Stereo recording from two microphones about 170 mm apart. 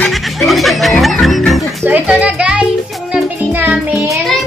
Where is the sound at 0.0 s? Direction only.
Centre (ahead or behind).